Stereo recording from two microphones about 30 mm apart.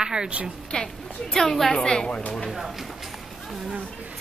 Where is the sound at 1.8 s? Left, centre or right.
Left.